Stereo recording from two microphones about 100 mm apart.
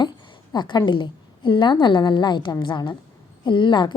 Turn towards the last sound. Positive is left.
turn(degrees=50)  # may be behind; listen again after turning